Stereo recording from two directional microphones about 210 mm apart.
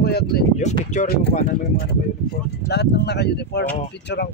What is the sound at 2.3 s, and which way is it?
Speech, 50° left (ahead or behind).